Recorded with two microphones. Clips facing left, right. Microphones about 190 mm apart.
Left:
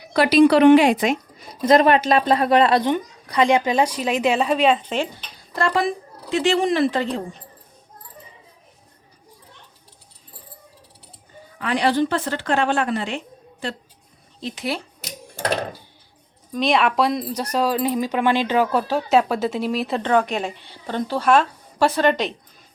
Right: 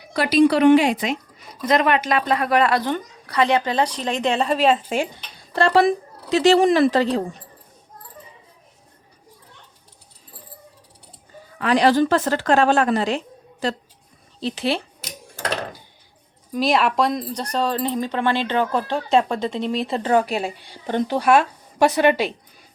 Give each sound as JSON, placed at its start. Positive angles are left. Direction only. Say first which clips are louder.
{"t": 0.1, "sound": "speech", "louder": "left 2 dB", "side_deg": 90}
{"t": 1.6, "sound": "a woman's voice", "louder": "left 4 dB", "side_deg": 30}
{"t": 5.5, "sound": "speech", "louder": "right 5 dB", "side_deg": -35}
{"t": 11.6, "sound": "speech", "louder": "right 3 dB", "side_deg": -40}
{"t": 16.5, "sound": "speech", "louder": "even", "side_deg": -5}